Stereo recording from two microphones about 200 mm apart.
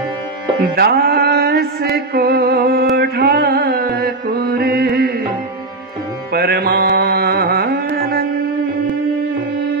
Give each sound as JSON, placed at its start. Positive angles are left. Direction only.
{"t": 0.7, "sound": "mantra", "side_deg": -50}
{"t": 3.0, "sound": "music", "side_deg": -50}
{"t": 6.3, "sound": "carnatic music", "side_deg": -50}